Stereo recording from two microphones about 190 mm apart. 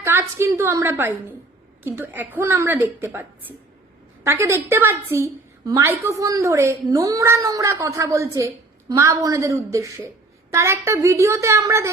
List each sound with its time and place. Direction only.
0.0 s a woman's voice: 15° right (ahead or behind)